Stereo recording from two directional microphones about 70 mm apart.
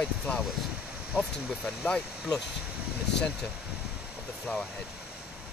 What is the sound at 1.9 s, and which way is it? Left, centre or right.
Speech, centre.